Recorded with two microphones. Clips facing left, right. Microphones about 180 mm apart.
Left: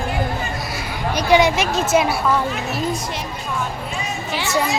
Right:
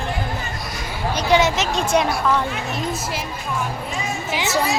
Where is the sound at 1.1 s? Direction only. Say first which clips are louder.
Left 2 dB; 10° left (ahead or behind).